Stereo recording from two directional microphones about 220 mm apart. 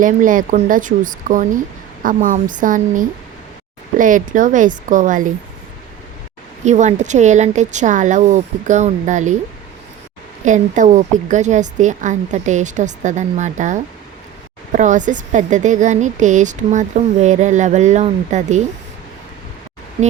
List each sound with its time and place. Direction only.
0.0 s a woman's voice: 35° right (ahead or behind)
6.7 s a woman's voice: 30° right (ahead or behind)
10.4 s a woman's voice: 35° right (ahead or behind)